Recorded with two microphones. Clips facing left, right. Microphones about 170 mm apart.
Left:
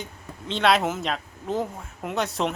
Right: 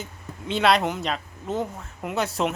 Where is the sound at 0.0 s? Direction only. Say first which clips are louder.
Right 1 dB; 5° right (ahead or behind).